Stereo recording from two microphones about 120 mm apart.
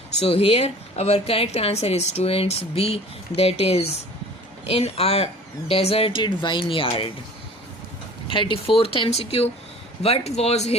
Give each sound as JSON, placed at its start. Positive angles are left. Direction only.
{"t": 0.2, "sound": "a woman's voice", "side_deg": 50}
{"t": 8.3, "sound": "a woman's voice", "side_deg": 45}